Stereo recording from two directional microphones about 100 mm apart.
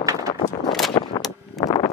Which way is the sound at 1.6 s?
45° left (ahead or behind).